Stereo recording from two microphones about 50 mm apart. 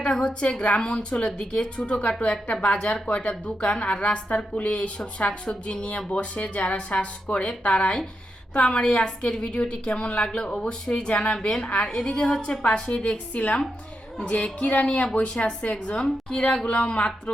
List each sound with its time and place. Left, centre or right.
0.3 s speech: left